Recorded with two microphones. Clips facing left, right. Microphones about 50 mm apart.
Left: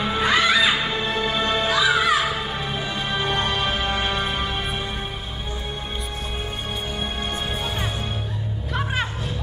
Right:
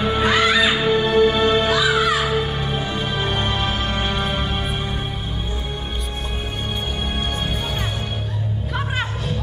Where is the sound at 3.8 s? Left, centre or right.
Centre.